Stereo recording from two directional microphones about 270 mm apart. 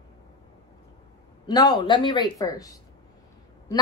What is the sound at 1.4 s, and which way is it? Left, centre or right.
Speech, centre.